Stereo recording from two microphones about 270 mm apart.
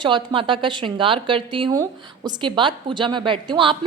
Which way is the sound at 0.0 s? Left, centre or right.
Centre.